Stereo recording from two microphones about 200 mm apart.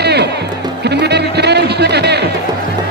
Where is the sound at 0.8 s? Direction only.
55° right (ahead or behind).